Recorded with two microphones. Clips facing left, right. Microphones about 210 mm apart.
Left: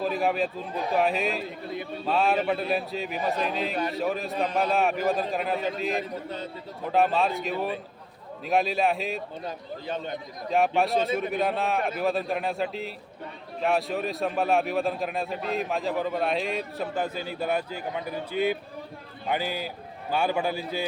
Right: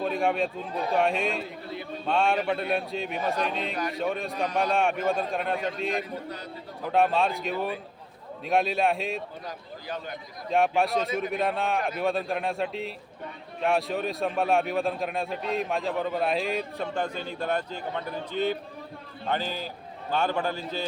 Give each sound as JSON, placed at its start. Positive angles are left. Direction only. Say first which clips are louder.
{"t": 0.0, "sound": "a man's voice", "louder": "even", "side_deg": 0}
{"t": 9.8, "sound": "speech", "louder": "left 3 dB", "side_deg": 25}
{"t": 10.5, "sound": "a man's voice", "louder": "even", "side_deg": 0}